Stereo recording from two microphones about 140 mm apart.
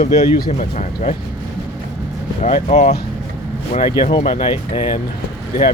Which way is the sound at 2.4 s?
50° left (ahead or behind).